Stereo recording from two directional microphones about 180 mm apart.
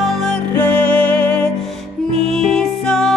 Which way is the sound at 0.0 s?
5° left (ahead or behind).